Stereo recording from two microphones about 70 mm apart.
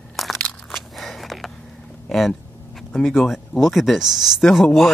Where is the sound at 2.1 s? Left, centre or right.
Centre.